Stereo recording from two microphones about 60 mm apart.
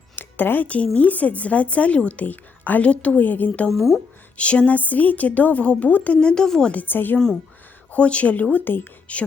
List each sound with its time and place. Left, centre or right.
0.2 s a woman's voice: left
3.7 s speech: centre
4.4 s a woman's voice: left
6.1 s a woman's voice: centre
6.7 s a woman's voice: left
7.9 s a woman's voice: left